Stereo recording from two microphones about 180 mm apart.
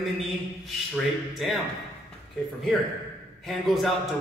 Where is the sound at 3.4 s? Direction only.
Centre (ahead or behind).